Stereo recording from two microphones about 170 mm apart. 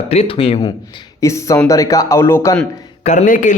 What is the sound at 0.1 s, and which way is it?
Speech, 35° left (ahead or behind).